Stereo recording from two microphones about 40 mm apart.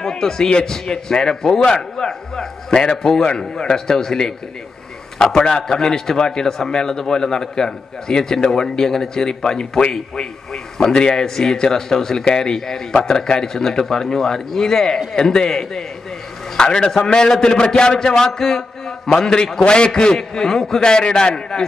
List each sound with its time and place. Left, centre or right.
0.0 s a man's voice: centre
9.8 s a man's voice: left
10.5 s a man's voice: centre
21.5 s a man's voice: centre